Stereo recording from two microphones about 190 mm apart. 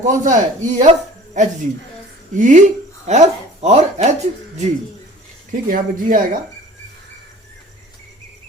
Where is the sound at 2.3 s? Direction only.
40° right (ahead or behind).